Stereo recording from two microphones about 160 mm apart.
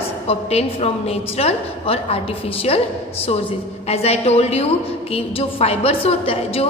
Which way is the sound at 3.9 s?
40° left (ahead or behind).